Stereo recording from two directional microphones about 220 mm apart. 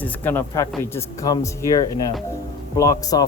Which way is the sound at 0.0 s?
10° left (ahead or behind).